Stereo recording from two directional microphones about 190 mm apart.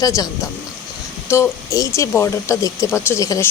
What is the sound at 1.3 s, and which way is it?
Speech, 15° left (ahead or behind).